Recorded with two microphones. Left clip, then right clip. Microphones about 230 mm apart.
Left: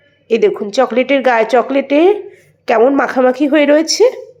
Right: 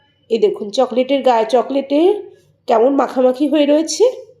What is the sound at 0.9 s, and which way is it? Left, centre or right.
A woman's voice, left.